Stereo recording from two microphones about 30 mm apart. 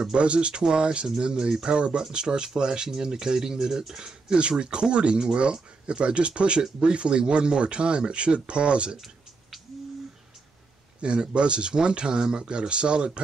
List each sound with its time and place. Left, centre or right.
0.2 s speech: right
1.8 s speech: right; by 4.4 s centre
4.4 s speech: right
8.9 s a sound: centre
11.0 s speech: right